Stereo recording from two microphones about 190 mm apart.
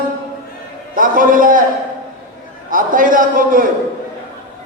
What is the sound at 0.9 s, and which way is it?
Speech, 45° right (ahead or behind).